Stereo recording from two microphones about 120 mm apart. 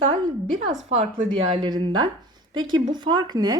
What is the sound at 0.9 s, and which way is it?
Speech, 60° right (ahead or behind).